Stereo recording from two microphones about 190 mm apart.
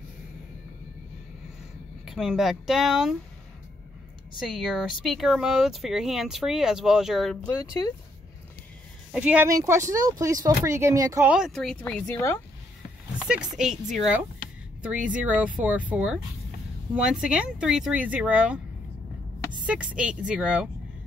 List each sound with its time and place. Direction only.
2.0 s speech: centre (ahead or behind)
4.4 s speech: 5° right (ahead or behind)
9.1 s speech: 5° right (ahead or behind); by 12.4 s 15° left (ahead or behind)
13.9 s speech: 5° right (ahead or behind)
19.6 s speech: 5° right (ahead or behind)